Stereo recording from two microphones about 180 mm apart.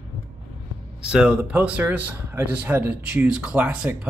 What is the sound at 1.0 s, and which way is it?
A man's voice, 5° right (ahead or behind).